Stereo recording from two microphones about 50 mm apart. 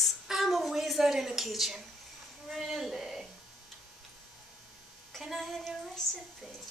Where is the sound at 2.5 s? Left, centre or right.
Centre.